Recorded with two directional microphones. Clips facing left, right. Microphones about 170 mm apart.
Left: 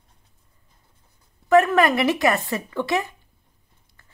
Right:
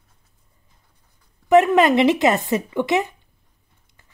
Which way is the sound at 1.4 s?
20° right (ahead or behind).